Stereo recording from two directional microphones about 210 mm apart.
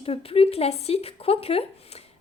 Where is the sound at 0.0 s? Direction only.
25° left (ahead or behind).